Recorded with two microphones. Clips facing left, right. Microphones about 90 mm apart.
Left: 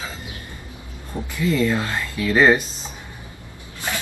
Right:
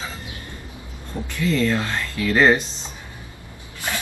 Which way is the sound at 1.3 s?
10° left (ahead or behind).